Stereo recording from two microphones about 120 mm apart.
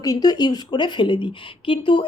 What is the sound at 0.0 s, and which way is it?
A woman's voice, 30° left (ahead or behind).